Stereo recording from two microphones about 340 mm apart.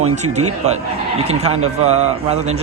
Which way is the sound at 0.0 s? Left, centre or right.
Centre.